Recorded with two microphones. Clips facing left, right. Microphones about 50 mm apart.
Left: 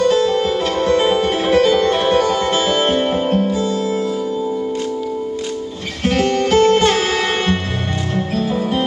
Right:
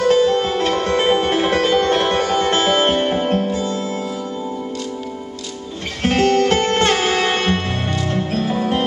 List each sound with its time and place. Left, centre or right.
0.1 s music: centre
3.0 s music: centre
3.5 s music: right
6.0 s music: right
6.9 s music: centre